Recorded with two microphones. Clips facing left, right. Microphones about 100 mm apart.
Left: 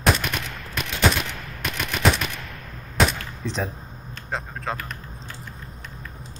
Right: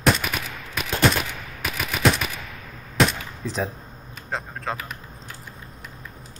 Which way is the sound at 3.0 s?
Centre (ahead or behind).